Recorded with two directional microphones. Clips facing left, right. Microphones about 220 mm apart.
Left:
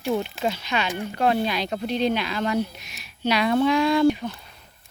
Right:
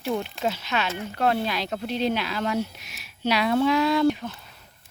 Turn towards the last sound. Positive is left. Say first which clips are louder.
# left 2 dB
turn(degrees=0)  # may be behind; listen again after turning